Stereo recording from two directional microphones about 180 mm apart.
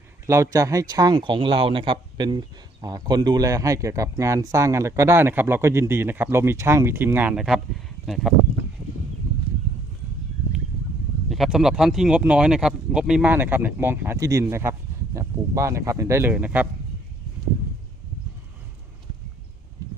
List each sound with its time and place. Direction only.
0.3 s speech: 15° right (ahead or behind); by 8.3 s centre (ahead or behind)
11.3 s speech: centre (ahead or behind)